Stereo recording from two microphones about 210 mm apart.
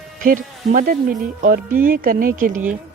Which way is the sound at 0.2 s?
40° right (ahead or behind).